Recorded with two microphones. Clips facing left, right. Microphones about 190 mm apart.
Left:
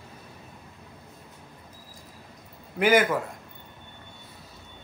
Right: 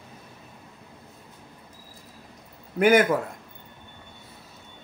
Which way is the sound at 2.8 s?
50° right (ahead or behind).